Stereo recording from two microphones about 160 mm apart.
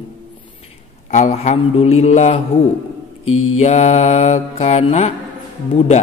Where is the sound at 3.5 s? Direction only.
45° left (ahead or behind).